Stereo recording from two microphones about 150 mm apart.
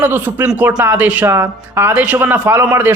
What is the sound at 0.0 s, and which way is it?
Speech, 15° right (ahead or behind).